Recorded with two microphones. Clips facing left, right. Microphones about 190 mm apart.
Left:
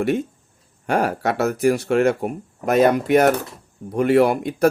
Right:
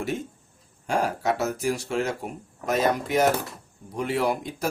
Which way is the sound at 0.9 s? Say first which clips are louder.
Left 4 dB; 65° left (ahead or behind).